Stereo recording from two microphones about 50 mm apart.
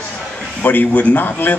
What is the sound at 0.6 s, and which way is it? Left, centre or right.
Speech, left.